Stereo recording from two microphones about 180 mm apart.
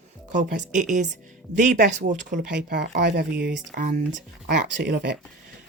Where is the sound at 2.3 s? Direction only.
70° right (ahead or behind).